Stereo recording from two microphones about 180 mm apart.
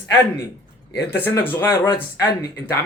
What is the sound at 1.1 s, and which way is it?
Speech, 10° left (ahead or behind).